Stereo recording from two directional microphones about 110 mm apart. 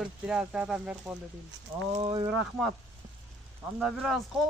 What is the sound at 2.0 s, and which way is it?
Speech, 50° right (ahead or behind).